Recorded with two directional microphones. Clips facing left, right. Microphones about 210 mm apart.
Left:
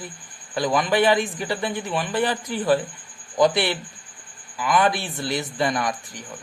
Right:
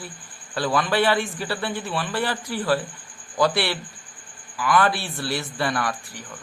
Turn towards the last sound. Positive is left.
turn(degrees=20)  # may be behind; listen again after turning